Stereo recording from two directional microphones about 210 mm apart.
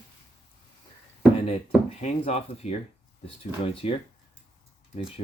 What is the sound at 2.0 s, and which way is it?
Speech, 30° left (ahead or behind).